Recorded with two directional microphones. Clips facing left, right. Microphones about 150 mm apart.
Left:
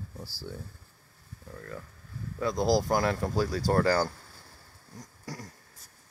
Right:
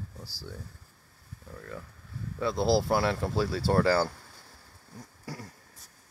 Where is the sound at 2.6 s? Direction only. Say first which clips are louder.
Even; 30° right (ahead or behind).